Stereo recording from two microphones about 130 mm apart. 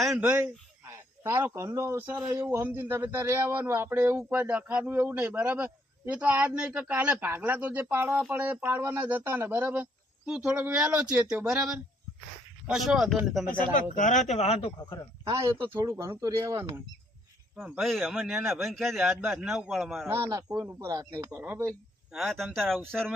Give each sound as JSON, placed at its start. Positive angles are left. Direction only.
{"t": 0.2, "sound": "a man's voice", "side_deg": -15}
{"t": 13.9, "sound": "speech", "side_deg": 75}
{"t": 15.2, "sound": "speech", "side_deg": -20}
{"t": 17.6, "sound": "a man's voice", "side_deg": 0}
{"t": 20.1, "sound": "speech", "side_deg": -20}
{"t": 22.1, "sound": "a man's voice", "side_deg": 0}